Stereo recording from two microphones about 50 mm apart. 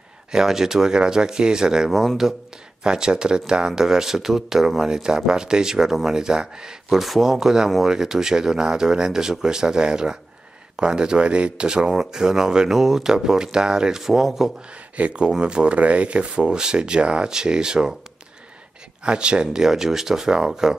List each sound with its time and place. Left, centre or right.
0.3 s speech: centre
7.0 s speech: centre
15.0 s speech: right
19.0 s speech: right